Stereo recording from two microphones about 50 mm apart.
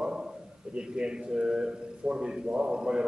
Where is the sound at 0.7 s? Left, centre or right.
Centre.